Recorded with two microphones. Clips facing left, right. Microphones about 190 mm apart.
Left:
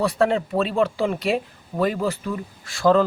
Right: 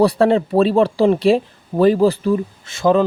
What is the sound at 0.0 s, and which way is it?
Speech, 35° right (ahead or behind).